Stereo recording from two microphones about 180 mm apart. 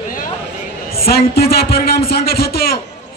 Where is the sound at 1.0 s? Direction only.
60° left (ahead or behind).